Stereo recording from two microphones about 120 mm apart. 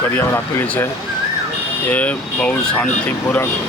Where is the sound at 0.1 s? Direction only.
20° left (ahead or behind).